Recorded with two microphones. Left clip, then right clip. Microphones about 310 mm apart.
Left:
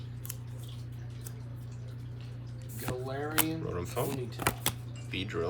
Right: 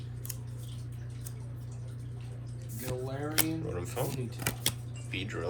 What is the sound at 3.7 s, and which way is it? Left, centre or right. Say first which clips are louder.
Speech: left 2 dB; centre.